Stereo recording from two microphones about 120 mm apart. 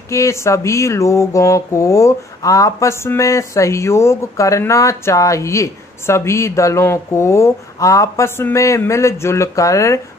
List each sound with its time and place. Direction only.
0.1 s speech: 25° left (ahead or behind)